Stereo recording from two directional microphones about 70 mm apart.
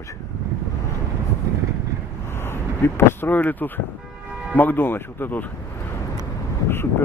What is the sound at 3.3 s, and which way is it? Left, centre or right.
Speech, left.